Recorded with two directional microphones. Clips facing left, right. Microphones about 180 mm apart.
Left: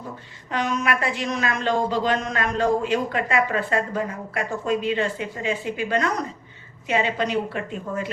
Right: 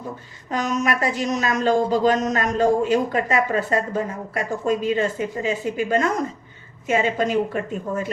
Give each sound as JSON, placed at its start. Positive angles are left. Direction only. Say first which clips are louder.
{"t": 0.5, "sound": "a man's voice", "louder": "right 2 dB", "side_deg": -45}